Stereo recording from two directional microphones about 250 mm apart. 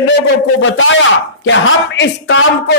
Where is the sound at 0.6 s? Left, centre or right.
Left.